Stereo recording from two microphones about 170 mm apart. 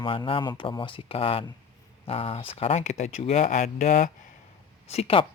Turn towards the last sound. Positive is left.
turn(degrees=35)  # may be behind; listen again after turning